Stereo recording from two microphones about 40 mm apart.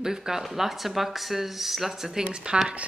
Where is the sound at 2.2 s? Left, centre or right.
Right.